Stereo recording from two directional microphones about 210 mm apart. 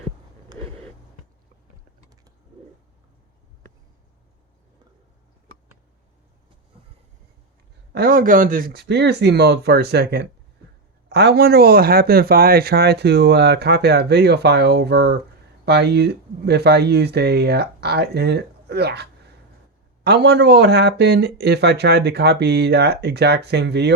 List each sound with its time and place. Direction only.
0.5 s vehicle: 20° right (ahead or behind)
7.9 s speech: 45° right (ahead or behind)
20.1 s speech: 50° right (ahead or behind)